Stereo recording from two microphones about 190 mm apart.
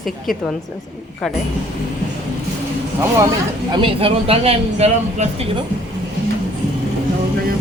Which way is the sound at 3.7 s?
30° right (ahead or behind).